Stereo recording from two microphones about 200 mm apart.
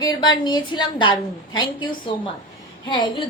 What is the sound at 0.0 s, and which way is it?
A woman's voice, 20° left (ahead or behind).